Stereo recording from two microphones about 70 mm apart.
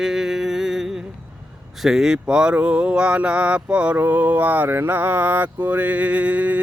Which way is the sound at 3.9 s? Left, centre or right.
Right.